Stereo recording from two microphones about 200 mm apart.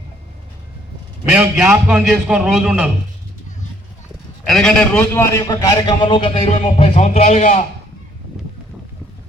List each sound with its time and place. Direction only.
1.2 s a man's voice: 5° right (ahead or behind)
4.4 s a man's voice: centre (ahead or behind); by 7.6 s 35° left (ahead or behind)